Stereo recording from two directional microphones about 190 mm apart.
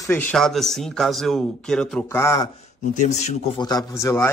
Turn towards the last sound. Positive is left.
turn(degrees=15)  # may be behind; listen again after turning